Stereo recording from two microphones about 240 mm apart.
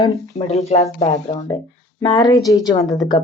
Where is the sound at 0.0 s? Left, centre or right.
Centre.